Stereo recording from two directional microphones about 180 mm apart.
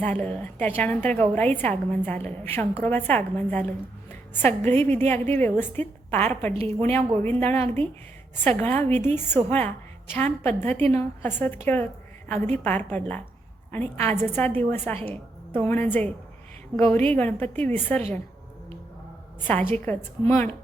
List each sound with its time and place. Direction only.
0.0 s a woman's voice: 10° left (ahead or behind)
6.5 s a woman's voice: 35° right (ahead or behind)
6.9 s a woman's voice: 10° left (ahead or behind)
19.5 s a woman's voice: 10° left (ahead or behind)